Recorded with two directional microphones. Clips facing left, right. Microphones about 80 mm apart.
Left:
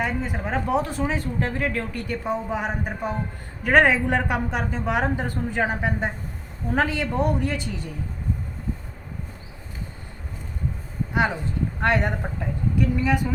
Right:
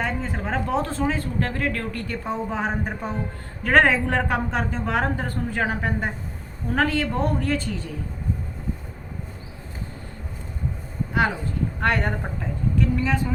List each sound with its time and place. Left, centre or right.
0.0 s speech: centre
11.8 s speech: centre